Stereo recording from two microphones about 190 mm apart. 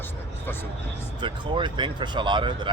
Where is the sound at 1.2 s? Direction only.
25° right (ahead or behind).